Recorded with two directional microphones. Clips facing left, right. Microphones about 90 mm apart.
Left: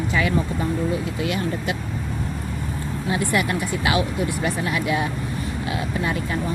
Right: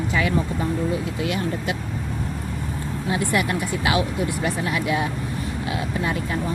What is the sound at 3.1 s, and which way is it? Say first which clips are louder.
Speech: even; 20° right (ahead or behind).